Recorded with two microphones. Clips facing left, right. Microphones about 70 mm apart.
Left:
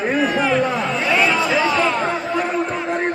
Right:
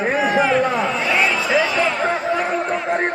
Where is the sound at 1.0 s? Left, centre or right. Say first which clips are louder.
Left 1 dB; right.